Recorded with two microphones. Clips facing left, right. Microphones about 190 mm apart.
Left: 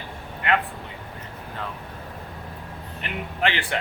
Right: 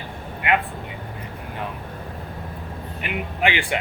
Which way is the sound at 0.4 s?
15° right (ahead or behind).